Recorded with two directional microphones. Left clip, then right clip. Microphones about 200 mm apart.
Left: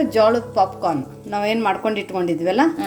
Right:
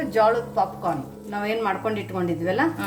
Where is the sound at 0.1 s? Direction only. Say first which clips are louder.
Even; 45° left (ahead or behind).